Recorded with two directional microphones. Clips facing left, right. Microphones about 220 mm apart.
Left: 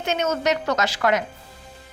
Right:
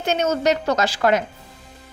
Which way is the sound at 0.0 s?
35° right (ahead or behind).